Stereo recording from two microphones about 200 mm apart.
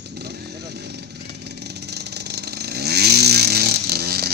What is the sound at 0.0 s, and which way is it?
Vehicle, 55° right (ahead or behind).